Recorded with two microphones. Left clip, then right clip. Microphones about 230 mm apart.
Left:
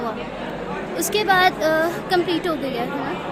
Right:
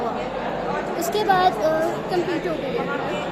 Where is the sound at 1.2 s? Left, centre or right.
Left.